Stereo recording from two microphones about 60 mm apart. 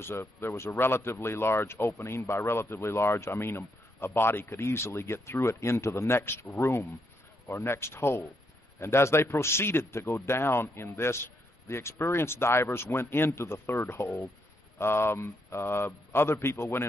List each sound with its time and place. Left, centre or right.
0.0 s a man's voice: left